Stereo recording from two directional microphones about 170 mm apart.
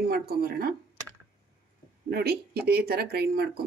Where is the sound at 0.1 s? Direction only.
65° right (ahead or behind).